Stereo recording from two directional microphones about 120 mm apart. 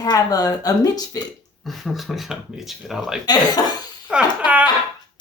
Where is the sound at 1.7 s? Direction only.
Centre (ahead or behind).